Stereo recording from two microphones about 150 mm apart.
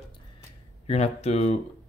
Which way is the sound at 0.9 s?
45° left (ahead or behind).